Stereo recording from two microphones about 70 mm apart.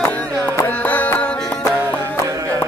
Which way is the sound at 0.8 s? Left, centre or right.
Left.